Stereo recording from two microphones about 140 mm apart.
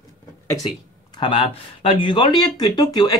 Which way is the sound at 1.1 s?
35° left (ahead or behind).